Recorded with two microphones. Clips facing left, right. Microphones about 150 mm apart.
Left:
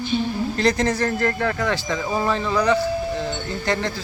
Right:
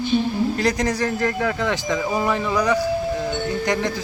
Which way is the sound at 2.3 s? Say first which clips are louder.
Left 2 dB; 15° right (ahead or behind).